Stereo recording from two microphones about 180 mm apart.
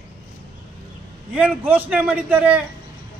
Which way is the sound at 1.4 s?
10° right (ahead or behind).